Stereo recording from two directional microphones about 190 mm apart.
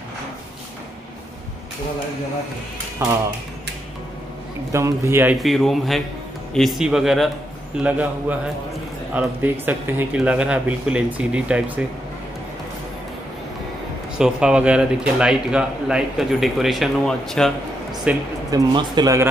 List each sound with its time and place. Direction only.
4.7 s a man's voice: 15° right (ahead or behind)
14.1 s speech: 5° right (ahead or behind)
18.5 s a man's voice: 20° right (ahead or behind)